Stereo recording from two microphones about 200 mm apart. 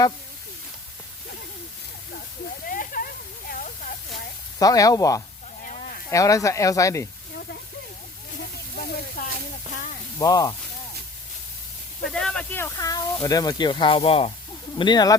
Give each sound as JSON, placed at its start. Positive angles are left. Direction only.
{"t": 2.6, "sound": "a sound", "side_deg": 45}
{"t": 4.6, "sound": "speech", "side_deg": 20}
{"t": 5.6, "sound": "livestock", "side_deg": 40}
{"t": 6.1, "sound": "speech", "side_deg": 15}
{"t": 8.7, "sound": "a sound", "side_deg": 45}
{"t": 10.2, "sound": "speech", "side_deg": 20}
{"t": 12.0, "sound": "speech", "side_deg": 5}